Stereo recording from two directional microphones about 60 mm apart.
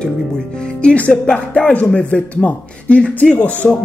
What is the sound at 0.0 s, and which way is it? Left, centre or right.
Speech, centre.